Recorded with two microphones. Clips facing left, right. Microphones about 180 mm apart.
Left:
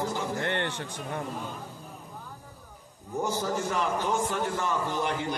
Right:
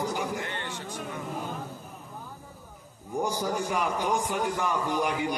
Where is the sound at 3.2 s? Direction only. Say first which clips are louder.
Even; 15° right (ahead or behind).